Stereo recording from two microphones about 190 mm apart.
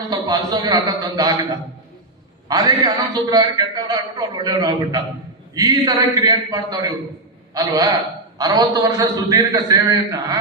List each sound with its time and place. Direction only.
0.1 s a man's voice: 20° right (ahead or behind)
2.5 s a man's voice: 20° right (ahead or behind)